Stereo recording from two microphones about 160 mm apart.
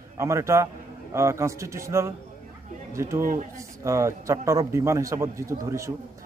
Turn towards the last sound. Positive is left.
turn(degrees=-20)  # may be behind; listen again after turning